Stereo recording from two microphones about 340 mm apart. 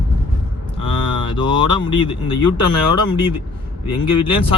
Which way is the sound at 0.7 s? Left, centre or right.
Centre.